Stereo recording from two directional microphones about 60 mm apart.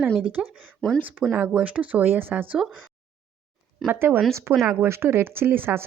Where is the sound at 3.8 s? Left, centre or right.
Right.